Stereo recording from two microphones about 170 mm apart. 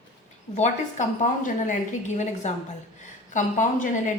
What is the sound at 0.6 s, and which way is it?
A woman's voice, 50° left (ahead or behind).